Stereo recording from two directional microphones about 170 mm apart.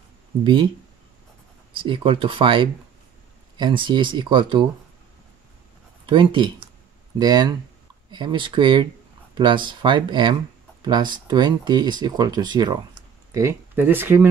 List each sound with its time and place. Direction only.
0.4 s speech: 30° right (ahead or behind)
1.7 s speech: 30° right (ahead or behind)
6.0 s speech: 30° right (ahead or behind)
13.3 s speech: 15° right (ahead or behind)